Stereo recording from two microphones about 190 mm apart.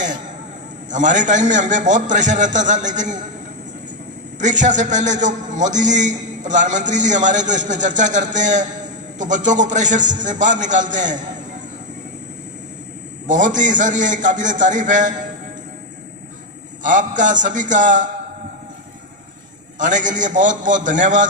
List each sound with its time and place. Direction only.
0.8 s a man's voice: 40° right (ahead or behind)
4.4 s a man's voice: 40° right (ahead or behind)
13.3 s a man's voice: 40° right (ahead or behind)
16.8 s a man's voice: 40° right (ahead or behind)
19.8 s a man's voice: 40° right (ahead or behind)